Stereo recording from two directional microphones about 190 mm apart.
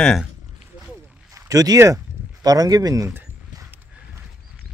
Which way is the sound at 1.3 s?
20° right (ahead or behind).